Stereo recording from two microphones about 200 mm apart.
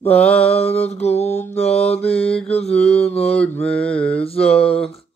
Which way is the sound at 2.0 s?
30° left (ahead or behind).